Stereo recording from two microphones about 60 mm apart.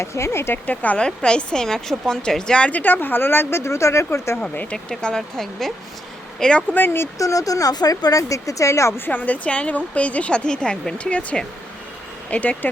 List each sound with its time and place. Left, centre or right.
0.0 s speech: left
0.7 s a woman's voice: left
1.0 s a woman's voice: centre
2.6 s speech: left
4.4 s a woman's voice: left
4.9 s a woman's voice: centre
6.7 s speech: left
7.2 s speech: left
9.0 s a woman's voice: left